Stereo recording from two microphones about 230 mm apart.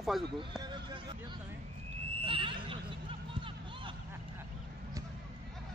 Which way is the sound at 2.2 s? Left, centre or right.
Right.